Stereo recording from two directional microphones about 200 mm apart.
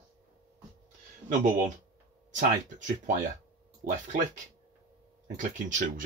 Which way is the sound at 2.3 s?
40° right (ahead or behind).